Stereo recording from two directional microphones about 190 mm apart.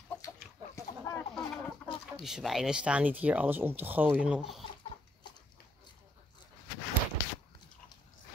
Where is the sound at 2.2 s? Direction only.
Centre (ahead or behind).